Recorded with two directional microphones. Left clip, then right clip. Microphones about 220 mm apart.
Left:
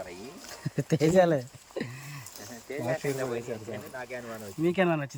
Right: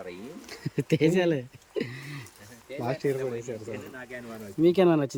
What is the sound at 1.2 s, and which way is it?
Speech, centre (ahead or behind).